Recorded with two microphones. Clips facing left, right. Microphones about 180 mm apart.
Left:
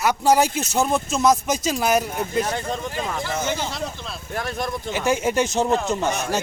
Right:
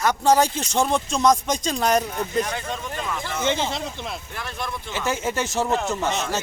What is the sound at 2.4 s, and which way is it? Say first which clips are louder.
Speech: left 3 dB; 35° left (ahead or behind).